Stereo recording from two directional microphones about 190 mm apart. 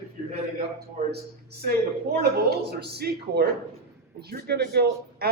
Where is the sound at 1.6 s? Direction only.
55° right (ahead or behind).